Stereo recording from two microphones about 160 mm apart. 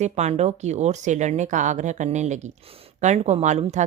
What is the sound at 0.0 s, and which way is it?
Speech, 45° right (ahead or behind).